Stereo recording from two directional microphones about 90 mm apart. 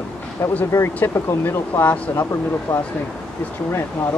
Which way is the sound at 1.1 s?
30° left (ahead or behind).